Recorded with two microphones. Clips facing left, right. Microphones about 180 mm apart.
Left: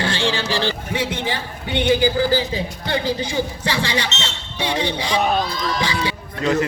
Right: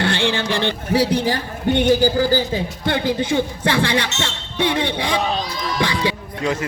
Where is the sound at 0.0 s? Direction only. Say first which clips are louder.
Right 2 dB; 60° right (ahead or behind).